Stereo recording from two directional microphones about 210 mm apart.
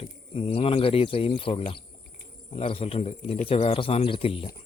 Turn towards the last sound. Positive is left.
turn(degrees=25)  # may be behind; listen again after turning